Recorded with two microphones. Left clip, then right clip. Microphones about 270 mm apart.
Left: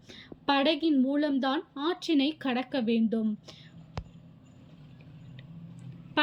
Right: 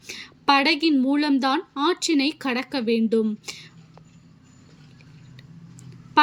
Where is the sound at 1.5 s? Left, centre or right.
Right.